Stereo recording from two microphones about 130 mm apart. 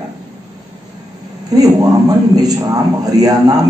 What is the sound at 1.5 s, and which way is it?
A man's voice, 30° right (ahead or behind).